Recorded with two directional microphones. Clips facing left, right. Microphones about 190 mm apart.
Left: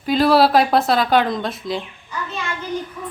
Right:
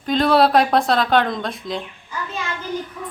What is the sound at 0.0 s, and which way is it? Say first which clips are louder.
Speech: left 1 dB; 5° left (ahead or behind).